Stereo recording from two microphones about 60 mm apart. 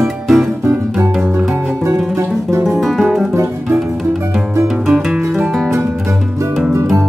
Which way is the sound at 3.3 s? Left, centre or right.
Right.